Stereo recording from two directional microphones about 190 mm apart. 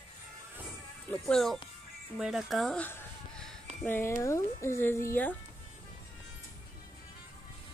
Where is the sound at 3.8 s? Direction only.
10° left (ahead or behind).